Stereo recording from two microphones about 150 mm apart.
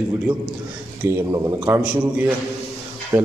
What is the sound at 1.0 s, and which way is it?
Speech, 20° right (ahead or behind).